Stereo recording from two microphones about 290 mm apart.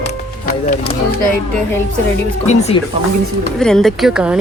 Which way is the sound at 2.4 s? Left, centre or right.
Left.